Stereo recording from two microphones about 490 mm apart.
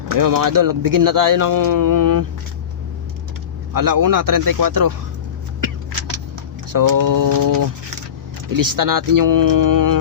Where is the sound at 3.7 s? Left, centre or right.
Right.